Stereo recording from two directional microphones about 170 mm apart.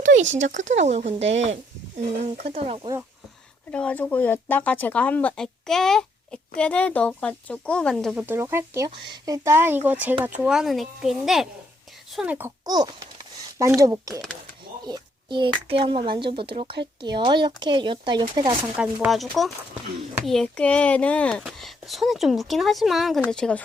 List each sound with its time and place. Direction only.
0.3 s speech: 45° right (ahead or behind)
2.5 s speech: 35° right (ahead or behind)
3.7 s speech: 5° left (ahead or behind)
12.6 s speech: 25° right (ahead or behind)
18.8 s speech: 5° right (ahead or behind)